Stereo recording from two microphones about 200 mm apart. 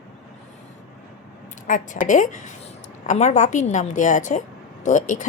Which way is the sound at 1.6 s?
40° left (ahead or behind).